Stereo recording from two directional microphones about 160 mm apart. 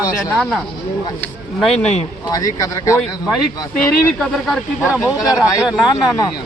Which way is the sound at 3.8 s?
5° left (ahead or behind).